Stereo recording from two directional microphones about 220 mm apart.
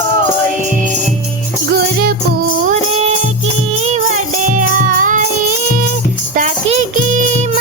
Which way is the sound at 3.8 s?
30° right (ahead or behind).